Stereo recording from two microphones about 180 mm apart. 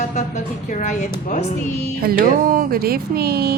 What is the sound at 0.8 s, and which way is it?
Speech, 45° left (ahead or behind).